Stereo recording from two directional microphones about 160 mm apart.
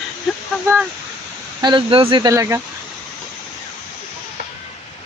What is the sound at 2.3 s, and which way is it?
Speech, 20° right (ahead or behind).